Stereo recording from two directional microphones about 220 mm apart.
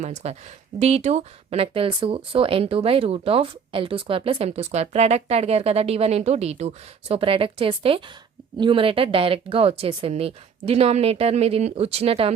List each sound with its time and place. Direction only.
0.0 s speech: 30° right (ahead or behind)